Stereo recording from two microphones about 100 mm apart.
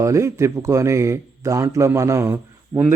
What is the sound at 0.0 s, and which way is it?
A man's voice, 30° right (ahead or behind).